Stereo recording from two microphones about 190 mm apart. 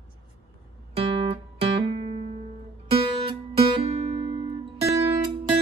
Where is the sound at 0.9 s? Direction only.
30° right (ahead or behind).